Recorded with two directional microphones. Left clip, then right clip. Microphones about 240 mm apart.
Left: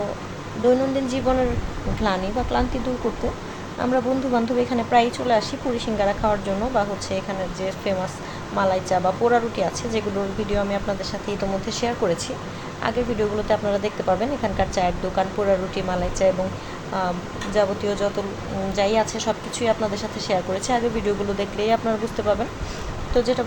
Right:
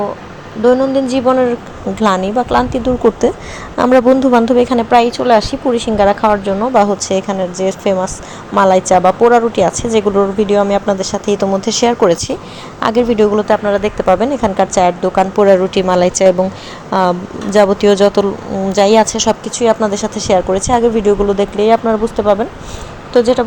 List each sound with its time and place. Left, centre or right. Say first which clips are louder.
0.6 s a woman's voice: right 9 dB; right
3.8 s a woman's voice: right 13 dB; right
13.5 s a woman's voice: right 9 dB; right